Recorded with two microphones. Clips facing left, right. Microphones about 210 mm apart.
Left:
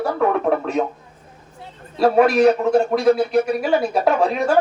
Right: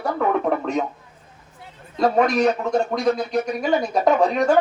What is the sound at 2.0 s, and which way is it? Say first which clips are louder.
A man's voice: left 4 dB; 5° left (ahead or behind).